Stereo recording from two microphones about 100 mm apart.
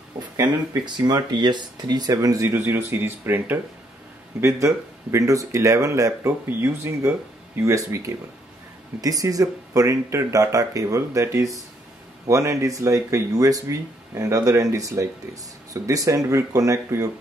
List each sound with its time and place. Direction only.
0.4 s speech: 45° right (ahead or behind)
2.5 s speech: 25° right (ahead or behind)